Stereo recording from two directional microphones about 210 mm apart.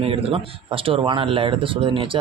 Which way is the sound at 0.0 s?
25° right (ahead or behind).